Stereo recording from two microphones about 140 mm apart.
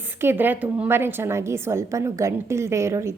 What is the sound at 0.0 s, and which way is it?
A woman's voice, 15° right (ahead or behind).